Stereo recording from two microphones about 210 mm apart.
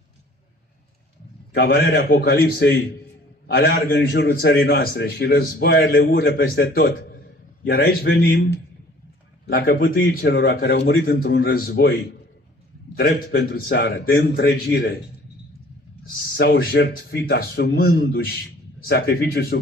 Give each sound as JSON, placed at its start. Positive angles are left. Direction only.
{"t": 1.5, "sound": "a man's voice", "side_deg": 50}
{"t": 16.2, "sound": "a man's voice", "side_deg": 50}